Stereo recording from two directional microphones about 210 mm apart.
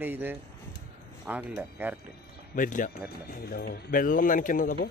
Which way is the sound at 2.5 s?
40° left (ahead or behind).